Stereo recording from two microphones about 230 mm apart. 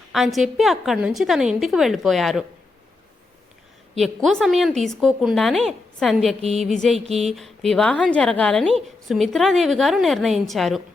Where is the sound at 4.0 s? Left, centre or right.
Centre.